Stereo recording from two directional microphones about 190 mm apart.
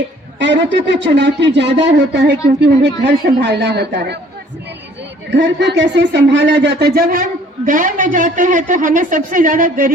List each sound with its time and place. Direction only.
0.3 s speech: 70° right (ahead or behind)
5.3 s speech: 65° right (ahead or behind); by 9.9 s 45° right (ahead or behind)